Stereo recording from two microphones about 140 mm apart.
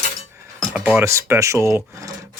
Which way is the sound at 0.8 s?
15° right (ahead or behind).